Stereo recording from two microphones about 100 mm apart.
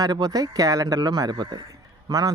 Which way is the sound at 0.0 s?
40° right (ahead or behind).